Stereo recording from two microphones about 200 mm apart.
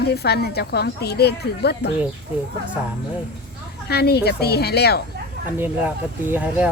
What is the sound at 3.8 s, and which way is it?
Speech, 55° left (ahead or behind).